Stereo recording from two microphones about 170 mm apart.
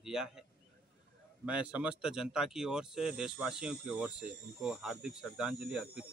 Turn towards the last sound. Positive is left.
turn(degrees=-5)  # may be behind; listen again after turning